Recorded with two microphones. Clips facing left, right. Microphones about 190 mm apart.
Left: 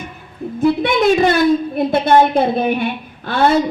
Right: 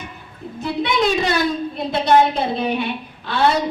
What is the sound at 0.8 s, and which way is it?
A woman's voice, 50° left (ahead or behind).